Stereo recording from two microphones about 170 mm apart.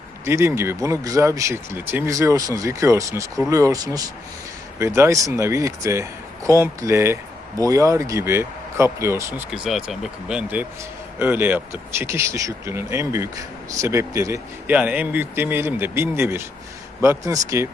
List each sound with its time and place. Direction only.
0.3 s speech: 15° right (ahead or behind)
9.5 s speech: centre (ahead or behind); by 17.7 s 20° right (ahead or behind)